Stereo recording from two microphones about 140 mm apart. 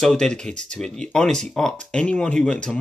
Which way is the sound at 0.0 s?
5° left (ahead or behind).